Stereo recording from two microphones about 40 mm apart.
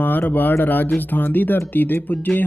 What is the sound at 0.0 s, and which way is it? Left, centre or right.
Speech, left.